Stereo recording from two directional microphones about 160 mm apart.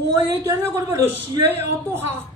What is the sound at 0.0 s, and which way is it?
A woman's voice, 20° right (ahead or behind).